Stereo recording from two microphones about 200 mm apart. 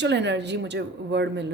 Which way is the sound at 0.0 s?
60° right (ahead or behind).